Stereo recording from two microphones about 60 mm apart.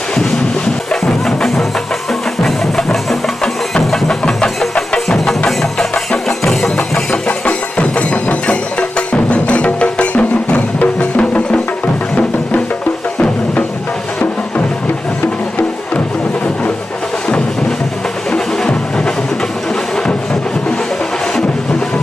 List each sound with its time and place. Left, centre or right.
0.2 s music: centre
6.4 s music: centre; by 11.6 s left
17.2 s music: centre
18.3 s vehicle: centre